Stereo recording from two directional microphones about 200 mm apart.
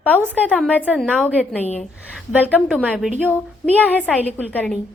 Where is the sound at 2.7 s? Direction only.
5° right (ahead or behind).